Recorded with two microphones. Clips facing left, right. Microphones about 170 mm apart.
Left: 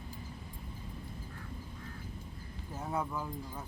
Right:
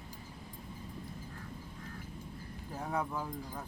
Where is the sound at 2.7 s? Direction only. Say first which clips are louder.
Even; 5° left (ahead or behind).